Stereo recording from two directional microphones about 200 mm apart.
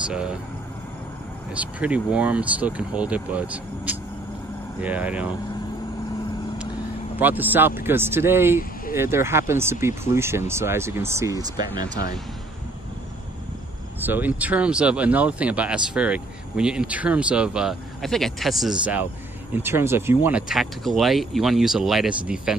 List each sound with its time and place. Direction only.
1.5 s speech: 5° right (ahead or behind)
7.2 s speech: 10° right (ahead or behind)
11.9 s speech: 55° left (ahead or behind)
14.0 s speech: 10° right (ahead or behind)